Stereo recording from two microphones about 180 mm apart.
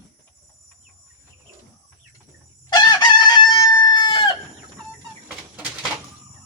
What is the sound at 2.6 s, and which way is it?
Chicken, 20° left (ahead or behind).